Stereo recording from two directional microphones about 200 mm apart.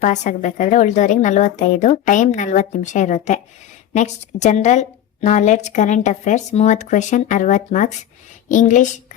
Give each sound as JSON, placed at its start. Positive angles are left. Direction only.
{"t": 0.0, "sound": "a woman's voice", "side_deg": 35}